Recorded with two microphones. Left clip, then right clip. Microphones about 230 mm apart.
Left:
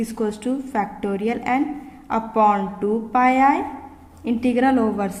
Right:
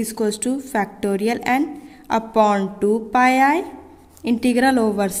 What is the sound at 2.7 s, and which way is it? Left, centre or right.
Speech, right.